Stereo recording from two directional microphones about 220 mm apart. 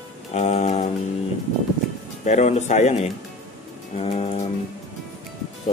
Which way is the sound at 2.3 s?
30° left (ahead or behind).